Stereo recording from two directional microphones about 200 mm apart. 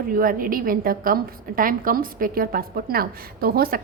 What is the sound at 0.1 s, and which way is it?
A woman's voice, 45° right (ahead or behind).